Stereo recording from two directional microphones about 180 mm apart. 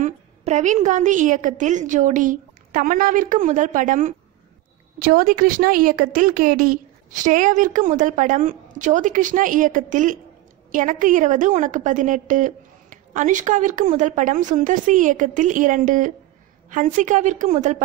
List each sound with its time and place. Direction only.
0.0 s a woman's voice: 45° right (ahead or behind)